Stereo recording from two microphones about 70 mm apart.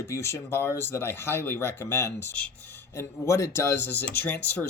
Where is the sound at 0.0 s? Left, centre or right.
Left.